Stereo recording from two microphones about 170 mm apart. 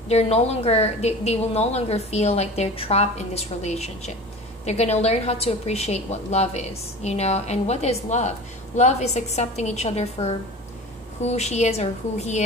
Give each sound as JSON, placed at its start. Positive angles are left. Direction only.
{"t": 0.1, "sound": "a woman's voice", "side_deg": 40}